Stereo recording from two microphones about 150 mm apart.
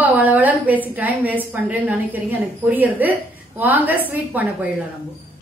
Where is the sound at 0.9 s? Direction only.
10° right (ahead or behind).